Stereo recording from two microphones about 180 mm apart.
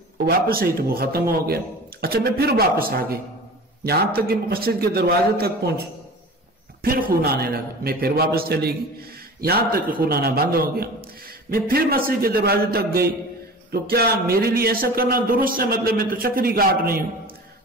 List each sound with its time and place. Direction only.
0.7 s a man's voice: 55° right (ahead or behind)